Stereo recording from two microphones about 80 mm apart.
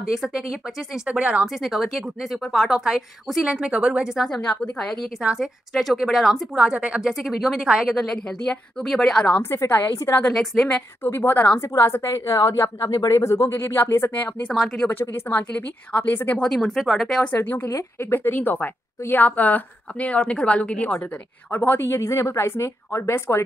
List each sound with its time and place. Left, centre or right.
0.1 s speech: centre
1.6 s a woman's voice: centre
3.4 s speech: centre
4.3 s a woman's voice: centre
5.2 s a woman's voice: centre
8.0 s a woman's voice: centre
9.4 s a woman's voice: left
10.3 s a woman's voice: centre
11.1 s a woman's voice: left
11.7 s a woman's voice: left
13.2 s a woman's voice: left
14.5 s a woman's voice: centre
14.9 s a woman's voice: left; by 17.2 s centre
17.4 s a woman's voice: left